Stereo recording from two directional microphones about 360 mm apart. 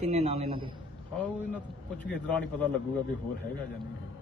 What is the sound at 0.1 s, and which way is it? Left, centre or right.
Speech, centre.